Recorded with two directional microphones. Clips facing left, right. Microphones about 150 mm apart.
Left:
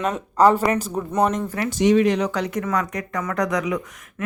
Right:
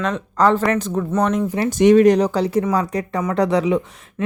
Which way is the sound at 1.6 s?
50° right (ahead or behind).